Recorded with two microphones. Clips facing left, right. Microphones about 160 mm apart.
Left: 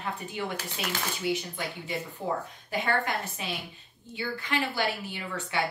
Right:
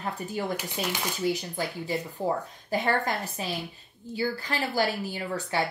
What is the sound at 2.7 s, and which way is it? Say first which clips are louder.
Speech: right 2 dB; 35° right (ahead or behind).